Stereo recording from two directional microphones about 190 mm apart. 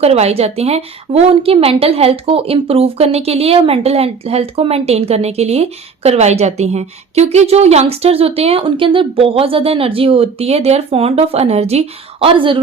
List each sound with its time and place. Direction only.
0.0 s a woman's voice: 35° right (ahead or behind)